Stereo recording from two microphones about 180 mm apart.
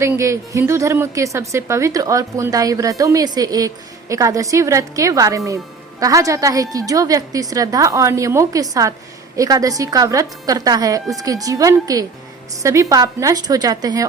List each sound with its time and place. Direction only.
0.0 s a woman's voice: 15° right (ahead or behind)